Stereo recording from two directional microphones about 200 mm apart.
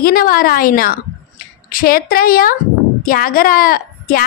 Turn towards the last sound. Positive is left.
turn(degrees=45)  # may be behind; listen again after turning